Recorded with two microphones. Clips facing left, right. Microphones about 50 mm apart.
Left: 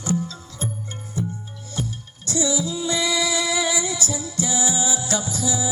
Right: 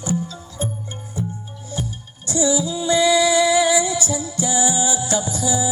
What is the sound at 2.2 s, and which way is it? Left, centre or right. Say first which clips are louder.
Music: right 4 dB; right.